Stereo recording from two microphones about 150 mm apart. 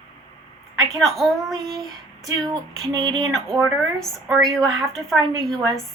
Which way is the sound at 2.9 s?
30° right (ahead or behind).